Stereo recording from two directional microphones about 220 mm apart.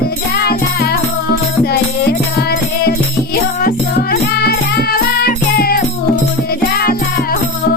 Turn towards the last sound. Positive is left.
turn(degrees=40)  # may be behind; listen again after turning